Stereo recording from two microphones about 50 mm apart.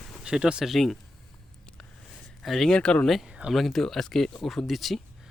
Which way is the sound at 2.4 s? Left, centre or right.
Centre.